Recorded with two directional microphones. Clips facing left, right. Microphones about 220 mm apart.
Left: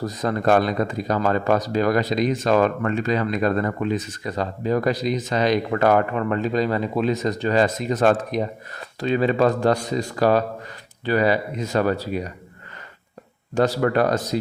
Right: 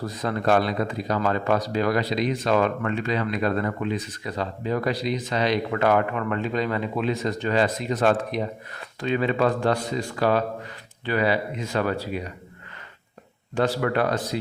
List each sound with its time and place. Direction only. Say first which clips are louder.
0.0 s speech: left 3 dB; 45° left (ahead or behind)
13.6 s speech: left 4 dB; 40° left (ahead or behind)